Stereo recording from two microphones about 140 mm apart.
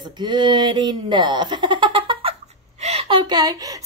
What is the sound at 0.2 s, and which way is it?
A woman's voice, 30° right (ahead or behind).